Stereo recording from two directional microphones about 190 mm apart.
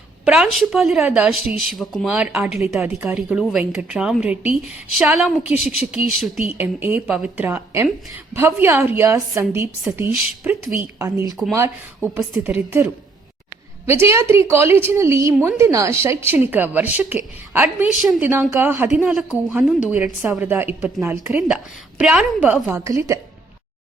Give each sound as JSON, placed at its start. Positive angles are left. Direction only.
{"t": 0.3, "sound": "a woman's voice", "side_deg": 0}
{"t": 2.6, "sound": "a woman's voice", "side_deg": -15}
{"t": 6.6, "sound": "a woman's voice", "side_deg": -10}
{"t": 18.0, "sound": "a woman's voice", "side_deg": 0}
{"t": 18.3, "sound": "a woman's voice", "side_deg": -15}